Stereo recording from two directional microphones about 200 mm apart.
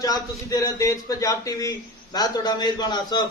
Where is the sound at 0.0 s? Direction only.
20° left (ahead or behind).